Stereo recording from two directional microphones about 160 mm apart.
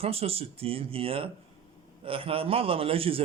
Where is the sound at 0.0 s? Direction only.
40° right (ahead or behind).